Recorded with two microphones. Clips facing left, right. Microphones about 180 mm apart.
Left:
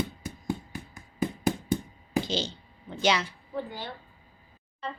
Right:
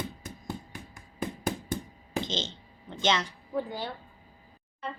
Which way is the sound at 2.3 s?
20° right (ahead or behind).